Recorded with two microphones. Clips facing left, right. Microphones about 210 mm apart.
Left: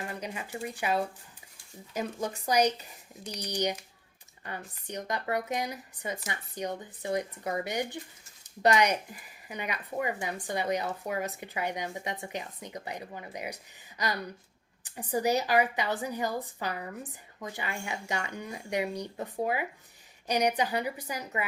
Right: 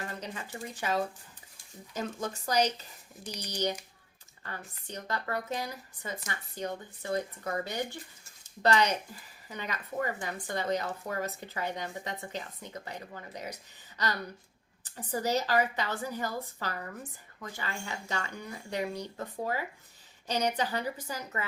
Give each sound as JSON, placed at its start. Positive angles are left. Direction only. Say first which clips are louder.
{"t": 0.1, "sound": "a woman's voice", "louder": "left 3 dB", "side_deg": 15}
{"t": 14.8, "sound": "a woman's voice", "louder": "left 4 dB", "side_deg": 15}